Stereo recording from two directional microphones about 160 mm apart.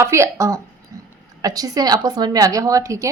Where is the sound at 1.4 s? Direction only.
25° right (ahead or behind).